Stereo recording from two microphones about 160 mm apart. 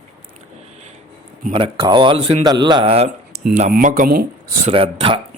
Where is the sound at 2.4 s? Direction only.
25° right (ahead or behind).